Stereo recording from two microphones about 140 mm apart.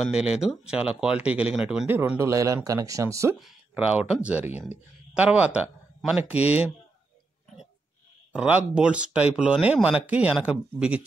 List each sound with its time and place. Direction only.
0.1 s speech: 5° right (ahead or behind)
1.9 s speech: 15° right (ahead or behind)
3.3 s speech: 5° right (ahead or behind)
8.3 s speech: 10° right (ahead or behind)